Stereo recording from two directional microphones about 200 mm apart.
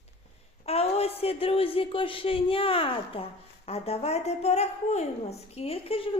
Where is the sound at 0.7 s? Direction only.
30° left (ahead or behind).